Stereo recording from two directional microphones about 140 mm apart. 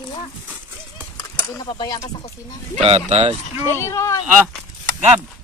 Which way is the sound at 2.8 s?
45° right (ahead or behind).